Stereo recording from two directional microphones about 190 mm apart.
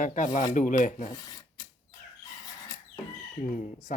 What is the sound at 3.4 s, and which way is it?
Speech, 45° left (ahead or behind).